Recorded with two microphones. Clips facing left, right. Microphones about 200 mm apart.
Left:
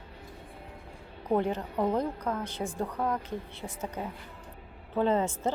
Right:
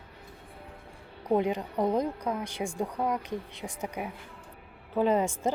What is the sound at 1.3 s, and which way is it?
A woman's voice, 15° right (ahead or behind).